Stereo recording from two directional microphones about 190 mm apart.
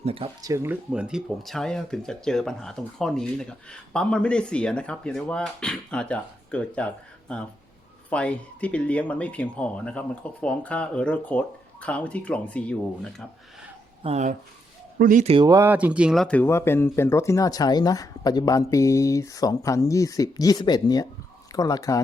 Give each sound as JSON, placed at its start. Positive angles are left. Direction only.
{"t": 0.0, "sound": "speech", "side_deg": -30}
{"t": 0.4, "sound": "speech", "side_deg": -15}
{"t": 14.0, "sound": "speech", "side_deg": -35}
{"t": 15.4, "sound": "speech", "side_deg": -15}